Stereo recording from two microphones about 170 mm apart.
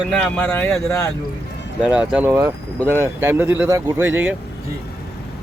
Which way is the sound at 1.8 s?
5° right (ahead or behind).